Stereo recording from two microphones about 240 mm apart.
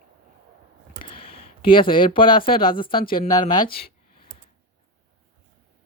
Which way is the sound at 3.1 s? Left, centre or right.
Centre.